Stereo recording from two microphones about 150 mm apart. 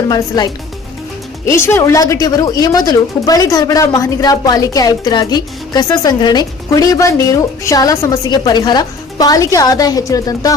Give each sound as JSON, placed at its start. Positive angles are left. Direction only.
{"t": 0.1, "sound": "speech", "side_deg": 25}